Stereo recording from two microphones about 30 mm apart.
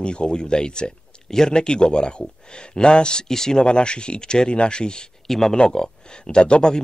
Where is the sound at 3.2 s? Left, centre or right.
Centre.